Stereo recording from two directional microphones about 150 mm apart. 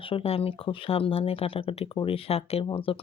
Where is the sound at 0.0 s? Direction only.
40° left (ahead or behind).